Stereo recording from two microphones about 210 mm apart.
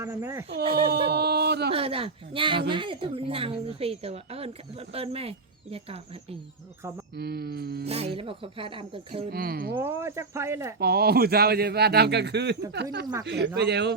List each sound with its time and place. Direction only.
0.0 s speech: 15° right (ahead or behind)
0.9 s speech: 50° right (ahead or behind)
1.7 s speech: 25° right (ahead or behind)
7.2 s speech: 50° right (ahead or behind)
7.9 s speech: 30° right (ahead or behind)
9.3 s speech: 45° right (ahead or behind)
9.7 s speech: 10° right (ahead or behind)
10.8 s speech: 50° right (ahead or behind)